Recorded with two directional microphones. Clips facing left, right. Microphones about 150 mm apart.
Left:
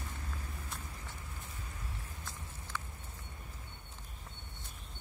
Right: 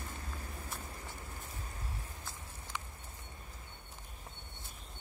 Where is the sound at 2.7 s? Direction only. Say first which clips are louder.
Left 1 dB; 15° right (ahead or behind).